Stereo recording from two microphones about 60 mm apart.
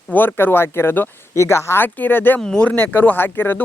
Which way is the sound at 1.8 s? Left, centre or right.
Left.